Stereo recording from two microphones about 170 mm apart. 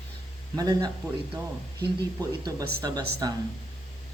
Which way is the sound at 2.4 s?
25° right (ahead or behind).